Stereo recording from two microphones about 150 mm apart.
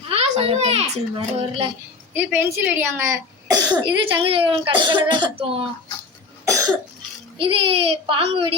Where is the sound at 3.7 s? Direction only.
30° right (ahead or behind).